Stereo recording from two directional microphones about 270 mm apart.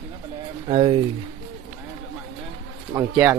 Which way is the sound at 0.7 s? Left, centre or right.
Centre.